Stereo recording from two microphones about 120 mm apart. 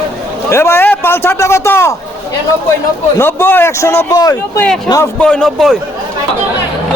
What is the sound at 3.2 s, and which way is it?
A man's voice, 20° left (ahead or behind).